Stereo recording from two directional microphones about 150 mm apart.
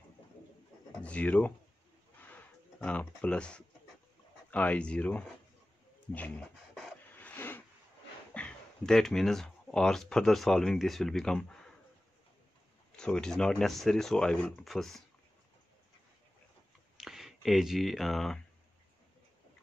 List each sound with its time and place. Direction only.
1.0 s speech: 10° left (ahead or behind)
2.2 s a sound: 10° left (ahead or behind)
4.5 s speech: 10° left (ahead or behind)
7.1 s a sound: 10° left (ahead or behind)
8.3 s speech: 10° left (ahead or behind)
12.9 s speech: 5° left (ahead or behind)
16.9 s speech: centre (ahead or behind)